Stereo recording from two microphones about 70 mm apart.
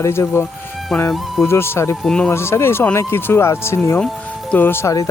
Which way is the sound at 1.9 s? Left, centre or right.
Centre.